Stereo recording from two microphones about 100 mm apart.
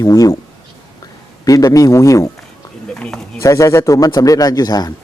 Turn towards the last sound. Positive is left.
turn(degrees=40)  # may be behind; listen again after turning